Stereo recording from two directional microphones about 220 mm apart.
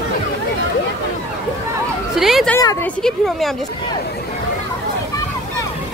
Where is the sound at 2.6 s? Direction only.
15° left (ahead or behind).